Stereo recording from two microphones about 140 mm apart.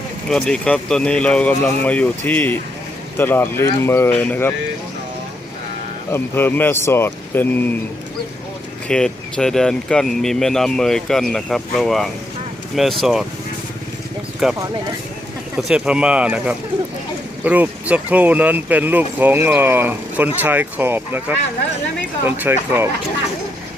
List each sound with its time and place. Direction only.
0.3 s speech: 5° left (ahead or behind)
6.1 s speech: 15° left (ahead or behind)
8.9 s speech: 5° left (ahead or behind)
14.4 s speech: centre (ahead or behind)
22.5 s speech: 15° right (ahead or behind)